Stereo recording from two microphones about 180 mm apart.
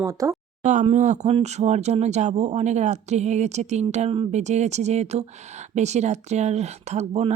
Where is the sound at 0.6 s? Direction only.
40° right (ahead or behind).